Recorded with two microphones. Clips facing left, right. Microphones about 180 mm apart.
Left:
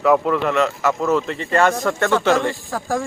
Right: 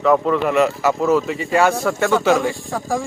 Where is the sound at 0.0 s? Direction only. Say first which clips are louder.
Right 1 dB; centre (ahead or behind).